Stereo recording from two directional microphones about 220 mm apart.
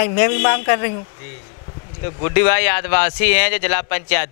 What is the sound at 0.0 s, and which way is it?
Speech, 15° left (ahead or behind).